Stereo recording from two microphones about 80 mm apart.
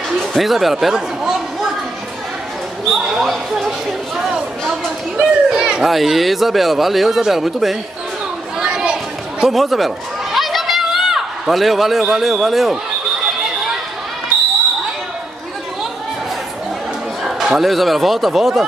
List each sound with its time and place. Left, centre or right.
0.2 s a sound: centre
2.8 s a child's voice: centre
4.2 s a sound: centre
4.8 s a child's voice: centre
8.5 s chatter: centre
17.2 s speech: centre